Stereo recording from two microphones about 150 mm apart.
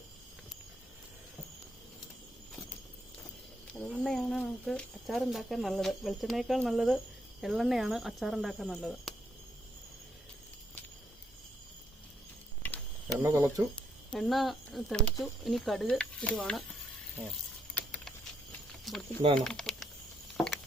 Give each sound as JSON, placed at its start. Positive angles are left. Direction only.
{"t": 3.7, "sound": "speech", "side_deg": 5}
{"t": 13.1, "sound": "speech", "side_deg": -20}
{"t": 13.7, "sound": "speech", "side_deg": 5}
{"t": 18.9, "sound": "speech", "side_deg": 0}
{"t": 19.5, "sound": "typing", "side_deg": 5}
{"t": 20.3, "sound": "a sound", "side_deg": 0}